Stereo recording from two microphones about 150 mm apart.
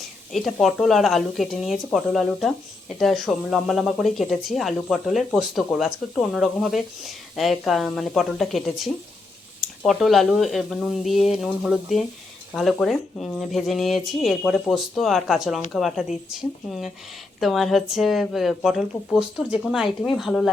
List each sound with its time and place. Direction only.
0.3 s speech: centre (ahead or behind)